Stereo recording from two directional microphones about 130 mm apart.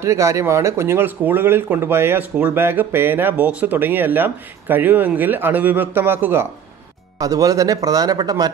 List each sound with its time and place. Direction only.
0.0 s speech: 25° right (ahead or behind)
7.2 s speech: 25° right (ahead or behind)